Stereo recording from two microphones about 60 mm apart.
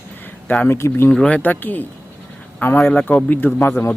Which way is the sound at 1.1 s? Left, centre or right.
Centre.